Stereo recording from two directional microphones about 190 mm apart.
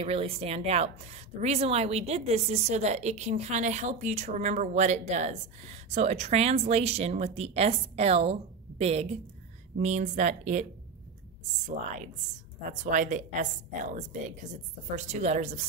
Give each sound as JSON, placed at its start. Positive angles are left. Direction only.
{"t": 0.0, "sound": "a woman's voice", "side_deg": -30}
{"t": 12.8, "sound": "a woman's voice", "side_deg": -40}
{"t": 15.0, "sound": "a woman's voice", "side_deg": -35}